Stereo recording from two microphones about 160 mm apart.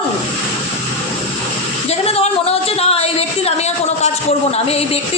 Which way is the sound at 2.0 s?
40° left (ahead or behind).